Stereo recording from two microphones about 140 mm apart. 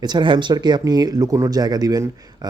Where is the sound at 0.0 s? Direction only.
35° right (ahead or behind).